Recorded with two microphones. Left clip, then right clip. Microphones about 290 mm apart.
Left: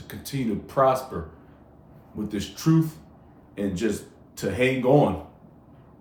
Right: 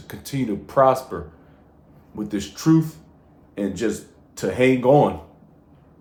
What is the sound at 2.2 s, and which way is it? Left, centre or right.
Speech, right.